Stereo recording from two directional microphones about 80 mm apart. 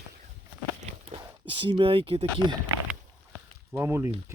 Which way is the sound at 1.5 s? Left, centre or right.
Right.